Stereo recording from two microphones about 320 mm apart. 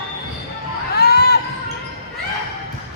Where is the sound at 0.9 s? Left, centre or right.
Left.